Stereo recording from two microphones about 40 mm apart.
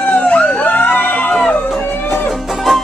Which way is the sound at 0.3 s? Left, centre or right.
Left.